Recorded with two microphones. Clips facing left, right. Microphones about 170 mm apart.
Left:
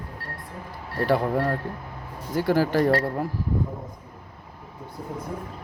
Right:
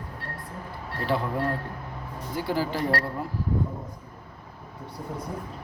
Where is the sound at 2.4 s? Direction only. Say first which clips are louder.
Left 6 dB; 45° left (ahead or behind).